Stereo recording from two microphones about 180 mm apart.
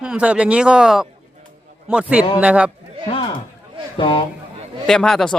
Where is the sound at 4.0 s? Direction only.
30° left (ahead or behind).